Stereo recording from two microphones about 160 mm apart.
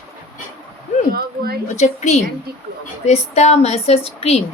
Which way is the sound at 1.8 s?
45° left (ahead or behind).